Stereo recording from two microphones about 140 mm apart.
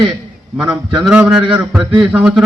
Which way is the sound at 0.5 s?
5° right (ahead or behind).